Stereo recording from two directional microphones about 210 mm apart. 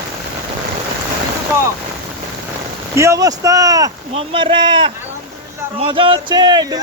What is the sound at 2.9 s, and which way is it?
Speech, 15° right (ahead or behind).